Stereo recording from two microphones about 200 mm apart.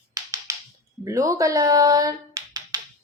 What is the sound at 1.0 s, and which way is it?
Speech, 15° right (ahead or behind).